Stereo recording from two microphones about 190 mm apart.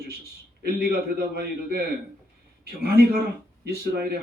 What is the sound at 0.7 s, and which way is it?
Speech, 55° right (ahead or behind).